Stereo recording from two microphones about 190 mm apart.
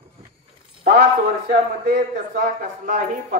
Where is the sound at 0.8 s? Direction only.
55° right (ahead or behind).